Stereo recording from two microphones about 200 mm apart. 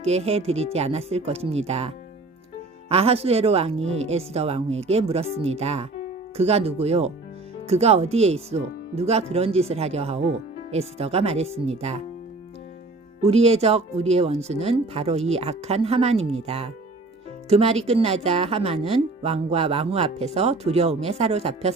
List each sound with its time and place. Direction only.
0.0 s a woman's voice: 30° right (ahead or behind)
2.9 s a woman's voice: 30° right (ahead or behind)
13.2 s a woman's voice: 30° right (ahead or behind)